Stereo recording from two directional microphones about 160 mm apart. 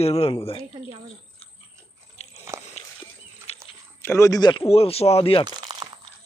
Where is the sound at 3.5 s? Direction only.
40° left (ahead or behind).